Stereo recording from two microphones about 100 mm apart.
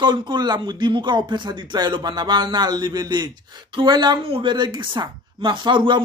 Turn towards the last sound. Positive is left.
turn(degrees=-50)  # may be behind; listen again after turning